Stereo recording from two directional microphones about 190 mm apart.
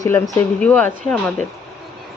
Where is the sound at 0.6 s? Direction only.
5° left (ahead or behind).